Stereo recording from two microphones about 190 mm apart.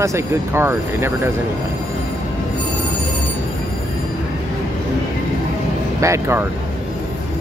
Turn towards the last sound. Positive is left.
turn(degrees=-15)  # may be behind; listen again after turning